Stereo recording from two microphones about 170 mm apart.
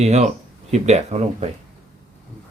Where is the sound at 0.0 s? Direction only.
40° right (ahead or behind).